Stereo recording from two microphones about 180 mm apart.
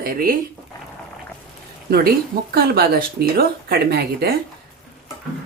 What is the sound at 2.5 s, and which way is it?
Speech, 60° right (ahead or behind).